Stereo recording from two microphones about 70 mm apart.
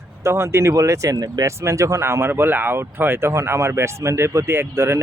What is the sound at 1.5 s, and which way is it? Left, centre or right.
Speech, right.